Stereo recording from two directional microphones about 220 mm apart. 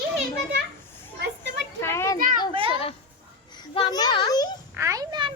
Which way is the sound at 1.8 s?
10° left (ahead or behind).